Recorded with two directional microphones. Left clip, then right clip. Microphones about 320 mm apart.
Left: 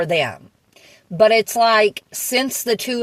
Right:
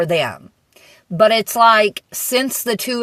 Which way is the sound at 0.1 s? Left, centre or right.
Right.